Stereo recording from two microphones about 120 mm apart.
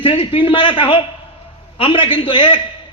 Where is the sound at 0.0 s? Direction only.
45° left (ahead or behind).